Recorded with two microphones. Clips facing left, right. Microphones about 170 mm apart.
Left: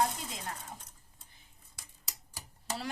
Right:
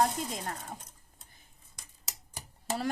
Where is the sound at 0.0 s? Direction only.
45° right (ahead or behind).